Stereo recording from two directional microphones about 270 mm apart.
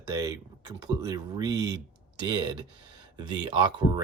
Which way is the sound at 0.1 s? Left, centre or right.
Centre.